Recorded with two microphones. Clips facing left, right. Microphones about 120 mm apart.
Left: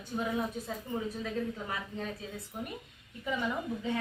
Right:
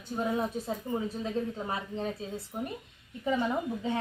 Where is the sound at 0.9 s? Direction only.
25° right (ahead or behind).